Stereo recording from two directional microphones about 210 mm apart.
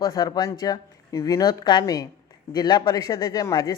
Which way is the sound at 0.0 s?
20° left (ahead or behind).